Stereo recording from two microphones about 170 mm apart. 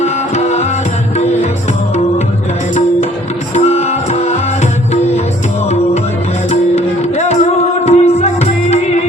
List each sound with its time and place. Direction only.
0.0 s music: 40° left (ahead or behind)
3.5 s music: 40° left (ahead or behind)
6.5 s music: 40° left (ahead or behind)